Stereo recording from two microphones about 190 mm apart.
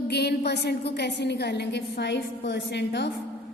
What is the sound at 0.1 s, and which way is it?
A woman's voice, 60° left (ahead or behind).